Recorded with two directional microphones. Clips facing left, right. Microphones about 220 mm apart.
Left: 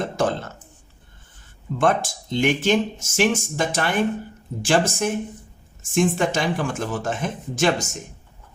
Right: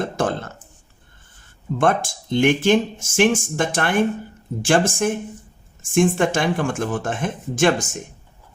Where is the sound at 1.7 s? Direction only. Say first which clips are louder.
Right 1 dB; 55° right (ahead or behind).